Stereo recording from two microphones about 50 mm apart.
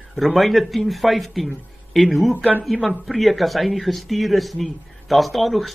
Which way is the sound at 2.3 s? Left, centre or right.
Right.